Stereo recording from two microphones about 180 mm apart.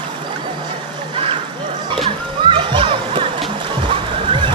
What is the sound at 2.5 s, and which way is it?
Music, 30° right (ahead or behind).